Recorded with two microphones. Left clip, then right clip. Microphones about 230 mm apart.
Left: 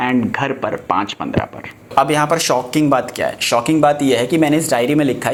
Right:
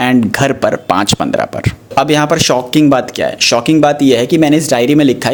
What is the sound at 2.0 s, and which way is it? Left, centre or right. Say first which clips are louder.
Speech: right 3 dB; right.